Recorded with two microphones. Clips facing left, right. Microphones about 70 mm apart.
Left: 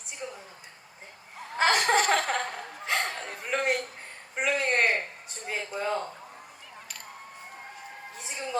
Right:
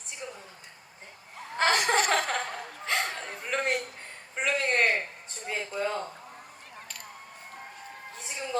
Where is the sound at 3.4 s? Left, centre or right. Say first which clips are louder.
Left 1 dB; centre.